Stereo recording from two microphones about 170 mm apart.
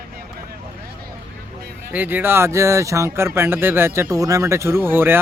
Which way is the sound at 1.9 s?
10° right (ahead or behind).